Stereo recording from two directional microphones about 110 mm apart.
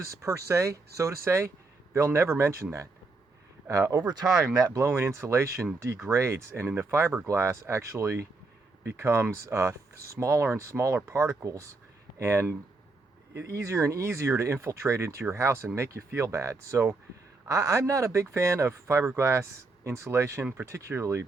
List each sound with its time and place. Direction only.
0.1 s speech: 30° right (ahead or behind)